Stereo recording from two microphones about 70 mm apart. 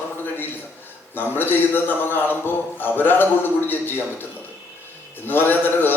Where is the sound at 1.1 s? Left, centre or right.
Left.